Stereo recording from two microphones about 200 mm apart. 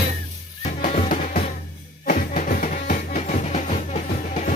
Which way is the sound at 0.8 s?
40° left (ahead or behind).